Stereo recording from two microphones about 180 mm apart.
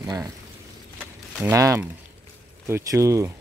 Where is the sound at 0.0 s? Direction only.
20° right (ahead or behind).